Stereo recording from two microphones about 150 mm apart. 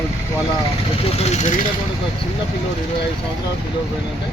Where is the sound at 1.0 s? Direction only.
45° left (ahead or behind).